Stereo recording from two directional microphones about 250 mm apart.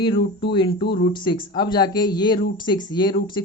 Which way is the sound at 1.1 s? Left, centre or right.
Centre.